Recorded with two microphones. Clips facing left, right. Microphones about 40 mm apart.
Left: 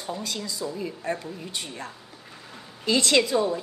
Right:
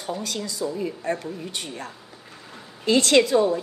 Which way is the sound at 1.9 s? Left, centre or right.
Centre.